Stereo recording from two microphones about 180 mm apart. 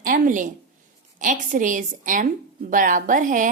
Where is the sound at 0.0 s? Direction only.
50° right (ahead or behind).